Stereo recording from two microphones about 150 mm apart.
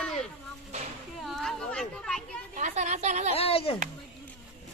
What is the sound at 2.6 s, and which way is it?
Speech, 50° right (ahead or behind).